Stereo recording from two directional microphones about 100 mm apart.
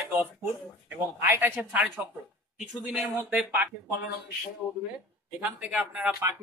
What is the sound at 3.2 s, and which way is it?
Speech, 15° right (ahead or behind).